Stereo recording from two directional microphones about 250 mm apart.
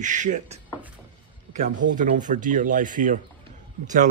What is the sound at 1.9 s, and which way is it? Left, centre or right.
Speech, right.